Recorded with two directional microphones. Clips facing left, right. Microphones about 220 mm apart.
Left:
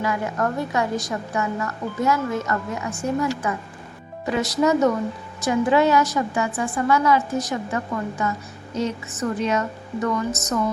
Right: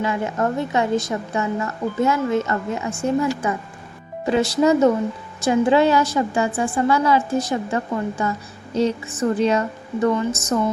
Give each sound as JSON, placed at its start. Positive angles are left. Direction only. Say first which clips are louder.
{"t": 0.0, "sound": "a woman's voice", "louder": "right 2 dB", "side_deg": -25}